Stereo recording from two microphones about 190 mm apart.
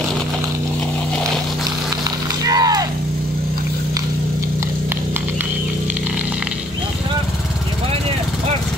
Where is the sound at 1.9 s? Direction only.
20° right (ahead or behind).